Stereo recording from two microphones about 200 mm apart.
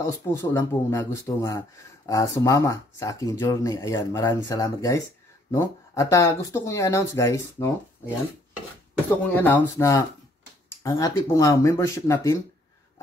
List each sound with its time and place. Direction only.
0.0 s speech: 15° left (ahead or behind)
9.3 s speech: 10° left (ahead or behind)